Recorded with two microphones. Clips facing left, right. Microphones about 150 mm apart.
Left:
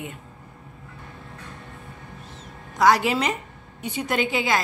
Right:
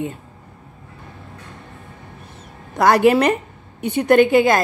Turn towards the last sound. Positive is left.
turn(degrees=-50)  # may be behind; listen again after turning